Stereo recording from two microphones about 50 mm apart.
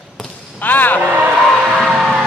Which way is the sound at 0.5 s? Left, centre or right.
Left.